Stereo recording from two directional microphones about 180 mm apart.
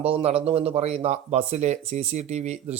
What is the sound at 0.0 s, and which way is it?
Speech, 35° right (ahead or behind).